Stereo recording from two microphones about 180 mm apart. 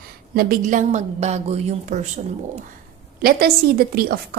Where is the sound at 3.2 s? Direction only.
55° right (ahead or behind).